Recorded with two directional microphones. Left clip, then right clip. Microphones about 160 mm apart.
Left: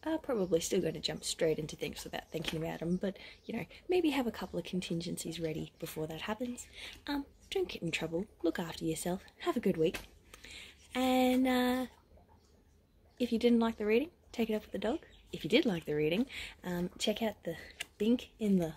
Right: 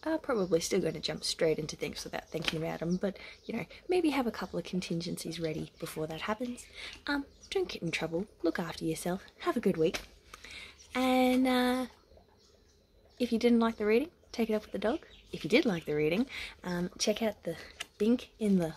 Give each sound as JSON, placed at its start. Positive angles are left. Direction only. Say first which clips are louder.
{"t": 0.0, "sound": "speech", "louder": "right 3 dB", "side_deg": -15}
{"t": 13.2, "sound": "speech", "louder": "right 2 dB", "side_deg": -15}